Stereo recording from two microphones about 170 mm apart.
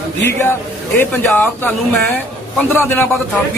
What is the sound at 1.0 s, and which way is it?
Speech, 10° left (ahead or behind).